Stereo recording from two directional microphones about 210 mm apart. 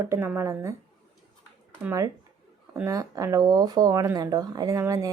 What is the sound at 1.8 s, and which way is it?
Speech, 15° right (ahead or behind).